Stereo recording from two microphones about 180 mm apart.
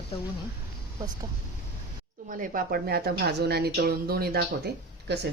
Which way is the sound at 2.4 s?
50° right (ahead or behind).